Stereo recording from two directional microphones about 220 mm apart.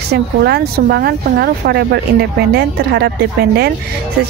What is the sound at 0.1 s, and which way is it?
A woman's voice, 45° right (ahead or behind).